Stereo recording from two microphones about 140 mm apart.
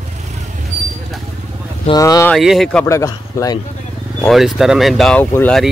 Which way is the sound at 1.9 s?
25° left (ahead or behind).